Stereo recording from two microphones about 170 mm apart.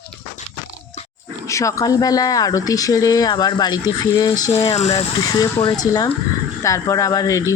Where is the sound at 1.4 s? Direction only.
20° left (ahead or behind).